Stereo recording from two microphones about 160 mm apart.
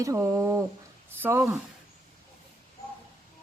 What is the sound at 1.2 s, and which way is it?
Speech, 15° right (ahead or behind).